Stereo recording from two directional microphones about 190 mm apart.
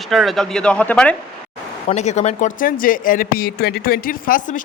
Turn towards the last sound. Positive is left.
turn(degrees=45)  # may be behind; listen again after turning